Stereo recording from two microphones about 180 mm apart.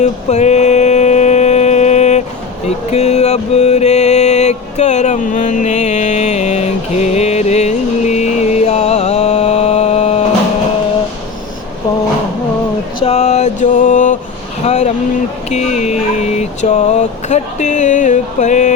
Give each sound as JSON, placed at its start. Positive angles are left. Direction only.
{"t": 0.0, "sound": "mantra", "side_deg": 40}
{"t": 2.6, "sound": "music", "side_deg": 40}
{"t": 13.0, "sound": "a sound", "side_deg": 35}
{"t": 15.4, "sound": "speech", "side_deg": 40}